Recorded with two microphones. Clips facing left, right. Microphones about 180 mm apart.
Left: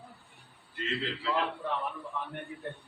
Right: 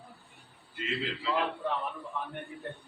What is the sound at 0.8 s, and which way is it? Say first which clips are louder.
Speech: even; centre (ahead or behind).